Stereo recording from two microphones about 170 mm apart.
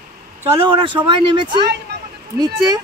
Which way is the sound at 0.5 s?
30° right (ahead or behind).